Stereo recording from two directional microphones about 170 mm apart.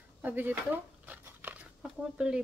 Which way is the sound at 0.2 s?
10° right (ahead or behind).